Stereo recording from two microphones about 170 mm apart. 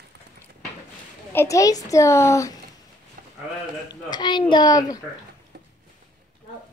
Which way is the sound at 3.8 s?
25° left (ahead or behind).